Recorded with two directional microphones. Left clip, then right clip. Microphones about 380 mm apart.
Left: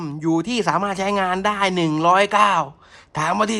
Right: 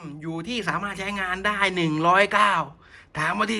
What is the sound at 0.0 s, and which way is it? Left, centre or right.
Speech, centre.